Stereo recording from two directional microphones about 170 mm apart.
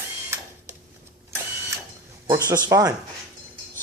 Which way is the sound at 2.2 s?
20° right (ahead or behind).